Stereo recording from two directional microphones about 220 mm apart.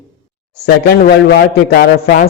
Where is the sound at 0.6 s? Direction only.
50° left (ahead or behind).